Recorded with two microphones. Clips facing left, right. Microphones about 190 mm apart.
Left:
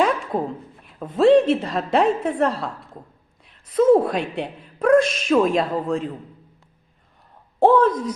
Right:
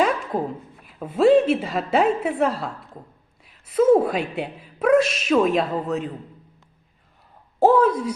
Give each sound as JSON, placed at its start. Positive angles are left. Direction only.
{"t": 0.0, "sound": "a woman's voice", "side_deg": 0}
{"t": 7.6, "sound": "speech", "side_deg": -10}